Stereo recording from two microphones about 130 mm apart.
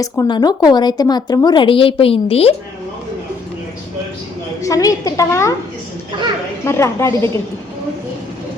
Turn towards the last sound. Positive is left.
turn(degrees=20)  # may be behind; listen again after turning